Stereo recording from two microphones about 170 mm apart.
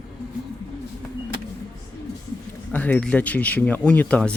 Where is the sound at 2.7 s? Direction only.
10° left (ahead or behind).